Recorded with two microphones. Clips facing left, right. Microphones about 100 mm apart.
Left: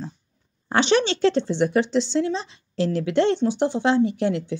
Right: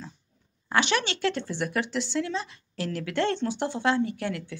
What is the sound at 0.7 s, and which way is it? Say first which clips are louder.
Speech: left 6 dB; 30° left (ahead or behind).